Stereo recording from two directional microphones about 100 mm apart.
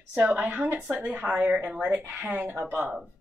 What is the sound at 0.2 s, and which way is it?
A woman's voice, 15° right (ahead or behind).